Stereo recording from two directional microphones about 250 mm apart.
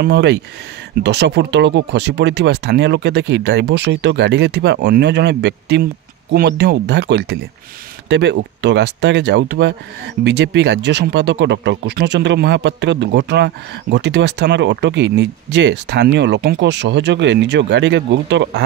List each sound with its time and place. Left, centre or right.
0.0 s speech: right